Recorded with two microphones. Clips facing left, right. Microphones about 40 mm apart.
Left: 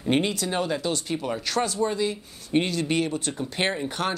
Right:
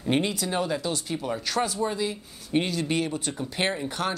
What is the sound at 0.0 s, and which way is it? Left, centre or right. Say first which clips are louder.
Speech: left 2 dB; centre.